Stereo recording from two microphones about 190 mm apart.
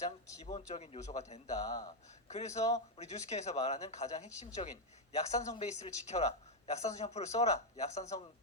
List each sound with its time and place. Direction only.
0.0 s speech: 35° left (ahead or behind)